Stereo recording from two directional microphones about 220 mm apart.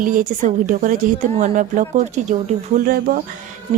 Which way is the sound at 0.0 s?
35° right (ahead or behind).